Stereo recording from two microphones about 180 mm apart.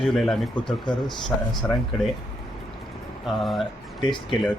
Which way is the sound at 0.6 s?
25° left (ahead or behind).